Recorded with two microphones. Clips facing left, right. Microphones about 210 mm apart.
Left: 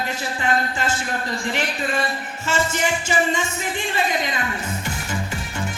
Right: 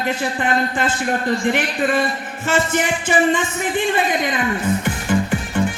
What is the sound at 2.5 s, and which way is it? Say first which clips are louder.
Music: right 4 dB; 55° right (ahead or behind).